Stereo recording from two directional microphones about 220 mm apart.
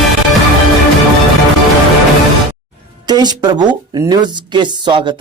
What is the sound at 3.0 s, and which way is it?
Speech, 20° right (ahead or behind).